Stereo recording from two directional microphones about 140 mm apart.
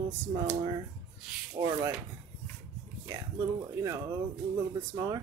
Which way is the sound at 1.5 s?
25° right (ahead or behind).